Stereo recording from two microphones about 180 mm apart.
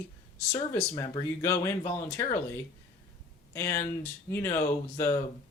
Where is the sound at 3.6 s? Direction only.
15° left (ahead or behind).